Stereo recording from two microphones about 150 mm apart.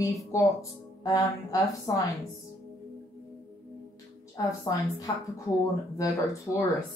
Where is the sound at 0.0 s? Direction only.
20° left (ahead or behind).